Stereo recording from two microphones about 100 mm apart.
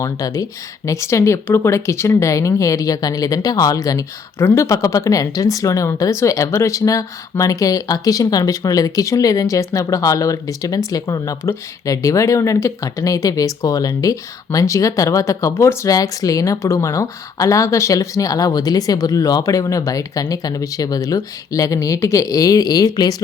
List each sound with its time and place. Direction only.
0.0 s speech: 35° left (ahead or behind)